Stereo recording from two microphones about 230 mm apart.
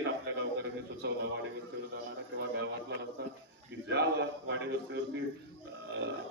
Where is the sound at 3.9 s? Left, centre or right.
Right.